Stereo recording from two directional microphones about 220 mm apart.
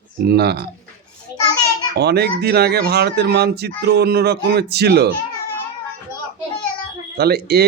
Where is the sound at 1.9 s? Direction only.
50° right (ahead or behind).